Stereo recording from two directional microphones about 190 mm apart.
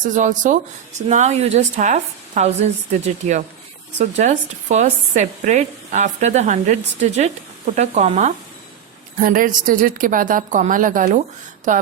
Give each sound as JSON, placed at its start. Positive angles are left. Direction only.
{"t": 0.0, "sound": "speech", "side_deg": -40}
{"t": 3.9, "sound": "speech", "side_deg": -40}
{"t": 9.1, "sound": "a woman's voice", "side_deg": -45}